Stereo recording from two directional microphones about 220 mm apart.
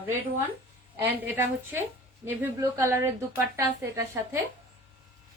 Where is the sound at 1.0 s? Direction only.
10° right (ahead or behind).